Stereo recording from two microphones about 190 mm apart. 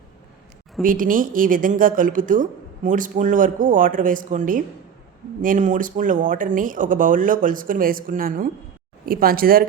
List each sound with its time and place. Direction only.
0.8 s speech: 45° right (ahead or behind)